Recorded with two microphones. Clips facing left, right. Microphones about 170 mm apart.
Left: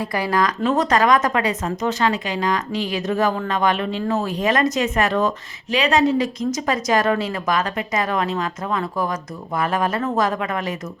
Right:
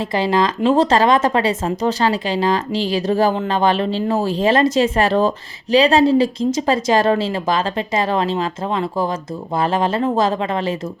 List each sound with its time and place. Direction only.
0.0 s speech: 25° right (ahead or behind)